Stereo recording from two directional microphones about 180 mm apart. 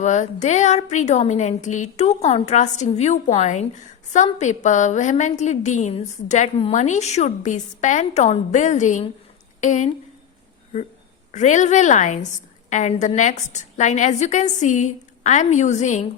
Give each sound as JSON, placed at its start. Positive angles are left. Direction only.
{"t": 0.0, "sound": "a woman's voice", "side_deg": 40}
{"t": 11.3, "sound": "a woman's voice", "side_deg": 40}